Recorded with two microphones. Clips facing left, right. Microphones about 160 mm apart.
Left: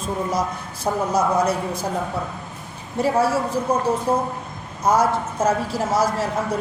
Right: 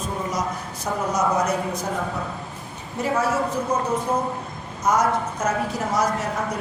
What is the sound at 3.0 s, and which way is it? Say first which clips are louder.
A woman's voice: left 3 dB; 30° left (ahead or behind).